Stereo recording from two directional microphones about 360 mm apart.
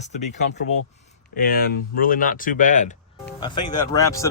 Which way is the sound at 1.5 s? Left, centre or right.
Left.